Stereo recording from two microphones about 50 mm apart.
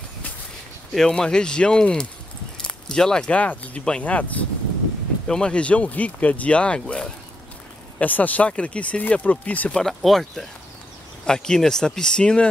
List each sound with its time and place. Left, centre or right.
0.9 s speech: centre
2.6 s a sound: centre
3.3 s speech: left
5.2 s speech: centre
5.5 s speech: left
8.0 s speech: left
9.8 s speech: centre